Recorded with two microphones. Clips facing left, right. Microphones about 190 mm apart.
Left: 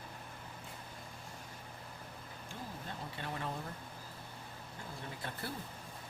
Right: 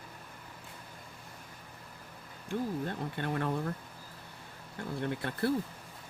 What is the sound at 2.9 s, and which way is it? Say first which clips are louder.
Speech: right 8 dB; 60° right (ahead or behind).